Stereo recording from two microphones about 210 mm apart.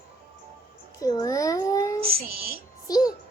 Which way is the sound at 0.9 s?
15° left (ahead or behind).